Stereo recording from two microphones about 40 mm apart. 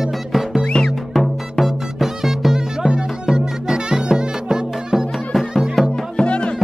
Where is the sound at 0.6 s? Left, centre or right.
Left.